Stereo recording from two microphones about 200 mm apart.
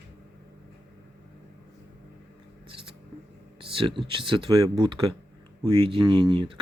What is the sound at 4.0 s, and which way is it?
Speech, 25° right (ahead or behind).